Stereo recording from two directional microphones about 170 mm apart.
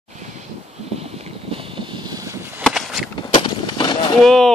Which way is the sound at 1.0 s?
35° right (ahead or behind).